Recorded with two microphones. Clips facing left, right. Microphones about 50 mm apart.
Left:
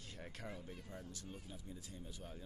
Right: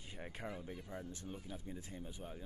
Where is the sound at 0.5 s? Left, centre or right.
Right.